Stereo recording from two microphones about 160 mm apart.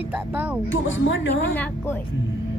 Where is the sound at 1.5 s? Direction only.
10° left (ahead or behind).